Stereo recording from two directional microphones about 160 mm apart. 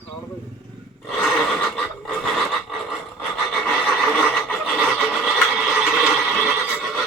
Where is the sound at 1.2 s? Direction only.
Centre (ahead or behind).